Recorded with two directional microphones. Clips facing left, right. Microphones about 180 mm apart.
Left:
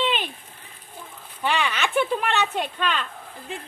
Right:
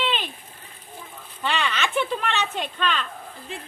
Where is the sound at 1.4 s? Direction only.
15° left (ahead or behind).